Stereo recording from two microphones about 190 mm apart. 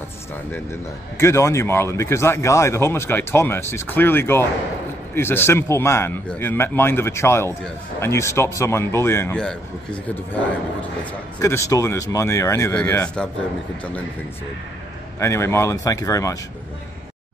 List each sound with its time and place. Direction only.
0.5 s speech: 15° left (ahead or behind)
11.4 s speech: 15° left (ahead or behind)
15.1 s speech: 15° left (ahead or behind)